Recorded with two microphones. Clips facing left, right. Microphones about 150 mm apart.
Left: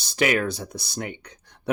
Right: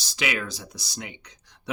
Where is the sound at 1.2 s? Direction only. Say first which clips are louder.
Left 8 dB; 55° left (ahead or behind).